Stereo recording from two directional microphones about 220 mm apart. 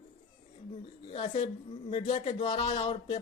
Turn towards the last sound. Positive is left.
turn(degrees=20)  # may be behind; listen again after turning